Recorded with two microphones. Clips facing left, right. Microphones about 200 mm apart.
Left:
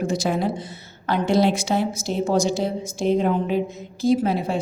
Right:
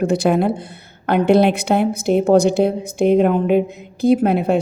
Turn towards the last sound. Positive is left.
turn(degrees=-60)  # may be behind; listen again after turning